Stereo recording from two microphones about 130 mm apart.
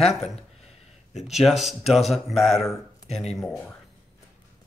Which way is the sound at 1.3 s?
Centre (ahead or behind).